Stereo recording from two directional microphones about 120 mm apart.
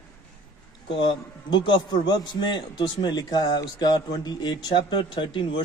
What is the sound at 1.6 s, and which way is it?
A man's voice, 40° left (ahead or behind).